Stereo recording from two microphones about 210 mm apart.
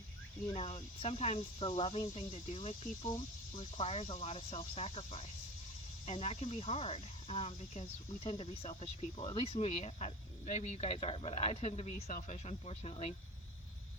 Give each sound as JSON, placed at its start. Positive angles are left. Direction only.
{"t": 0.5, "sound": "speech", "side_deg": 25}